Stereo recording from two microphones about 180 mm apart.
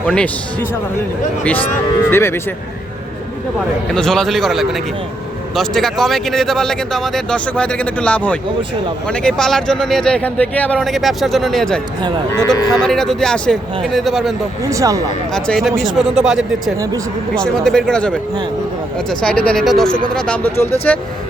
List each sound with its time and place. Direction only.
0.0 s a man's voice: 5° left (ahead or behind)
2.0 s speech: 15° left (ahead or behind)
3.9 s speech: 5° left (ahead or behind)
14.6 s speech: 15° right (ahead or behind)
15.3 s speech: 5° left (ahead or behind)
16.7 s speech: 20° right (ahead or behind)
17.3 s speech: 5° left (ahead or behind)